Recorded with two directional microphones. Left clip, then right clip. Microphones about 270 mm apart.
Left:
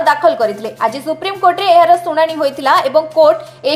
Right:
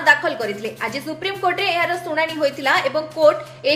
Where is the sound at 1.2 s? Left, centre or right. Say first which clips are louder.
Left 5 dB; centre.